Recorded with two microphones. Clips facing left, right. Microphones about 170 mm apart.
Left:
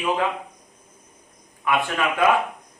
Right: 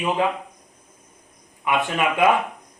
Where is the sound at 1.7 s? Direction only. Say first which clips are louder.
Right 1 dB; 20° right (ahead or behind).